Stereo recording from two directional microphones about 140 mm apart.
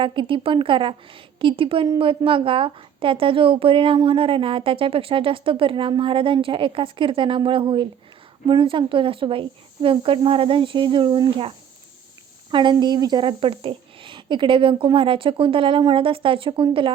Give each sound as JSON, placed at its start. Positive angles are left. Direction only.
{"t": 0.0, "sound": "a woman's voice", "side_deg": -35}